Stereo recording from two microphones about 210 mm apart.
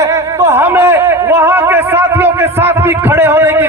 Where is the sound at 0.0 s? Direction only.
15° right (ahead or behind).